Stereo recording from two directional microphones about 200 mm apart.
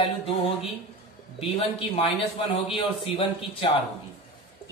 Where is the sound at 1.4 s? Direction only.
30° left (ahead or behind).